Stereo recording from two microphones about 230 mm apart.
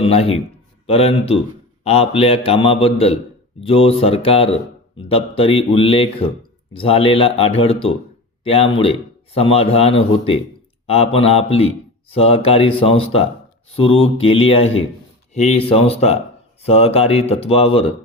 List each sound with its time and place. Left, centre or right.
0.0 s a man's voice: left